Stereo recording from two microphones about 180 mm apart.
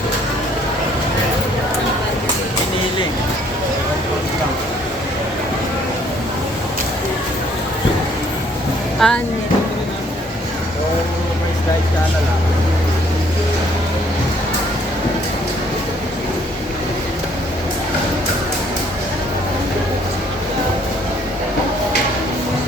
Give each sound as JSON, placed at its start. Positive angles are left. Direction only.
{"t": 9.0, "sound": "speech", "side_deg": 5}